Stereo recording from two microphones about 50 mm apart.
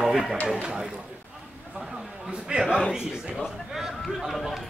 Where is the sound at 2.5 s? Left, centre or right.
Right.